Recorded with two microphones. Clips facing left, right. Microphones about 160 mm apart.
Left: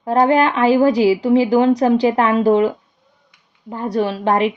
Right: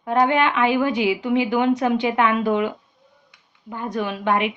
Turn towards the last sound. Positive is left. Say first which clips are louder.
# left 5 dB
turn(degrees=35)  # may be behind; listen again after turning